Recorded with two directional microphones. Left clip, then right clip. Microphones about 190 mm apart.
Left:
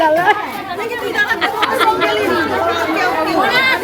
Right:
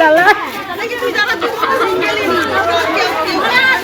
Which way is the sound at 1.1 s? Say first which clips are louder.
Even; 70° left (ahead or behind).